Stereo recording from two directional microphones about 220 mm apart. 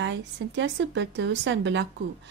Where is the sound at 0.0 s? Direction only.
55° right (ahead or behind).